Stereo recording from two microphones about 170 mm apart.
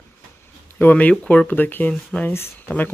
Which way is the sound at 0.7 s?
10° left (ahead or behind).